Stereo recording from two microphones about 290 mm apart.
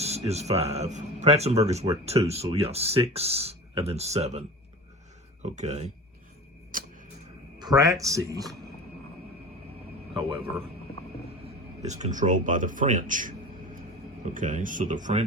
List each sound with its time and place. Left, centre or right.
0.0 s speech: right
6.7 s a sound: right
7.6 s speech: centre
10.2 s speech: centre
11.8 s speech: right
14.3 s speech: right